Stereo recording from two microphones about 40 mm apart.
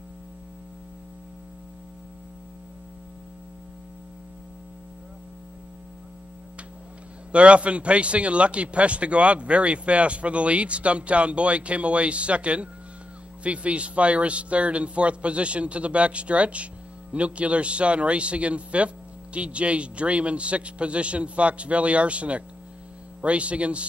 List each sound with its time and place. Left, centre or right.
7.3 s speech: right